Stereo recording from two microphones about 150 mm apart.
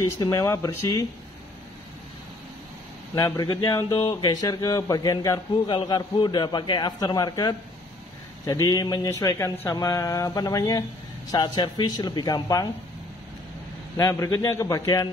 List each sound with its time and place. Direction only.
0.0 s speech: 20° left (ahead or behind)
3.2 s speech: 20° left (ahead or behind)
13.9 s speech: 25° left (ahead or behind)